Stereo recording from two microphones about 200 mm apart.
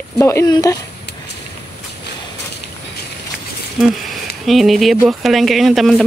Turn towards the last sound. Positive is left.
turn(degrees=0)  # may be behind; listen again after turning